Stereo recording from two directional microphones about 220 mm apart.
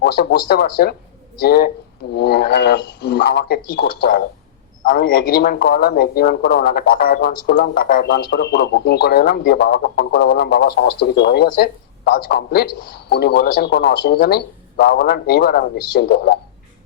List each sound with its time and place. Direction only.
0.0 s speech: 45° left (ahead or behind)